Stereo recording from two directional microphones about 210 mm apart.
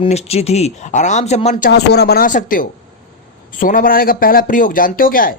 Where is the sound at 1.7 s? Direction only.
50° left (ahead or behind).